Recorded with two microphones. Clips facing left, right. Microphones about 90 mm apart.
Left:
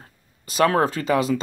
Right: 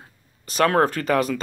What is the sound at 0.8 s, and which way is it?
Speech, 30° left (ahead or behind).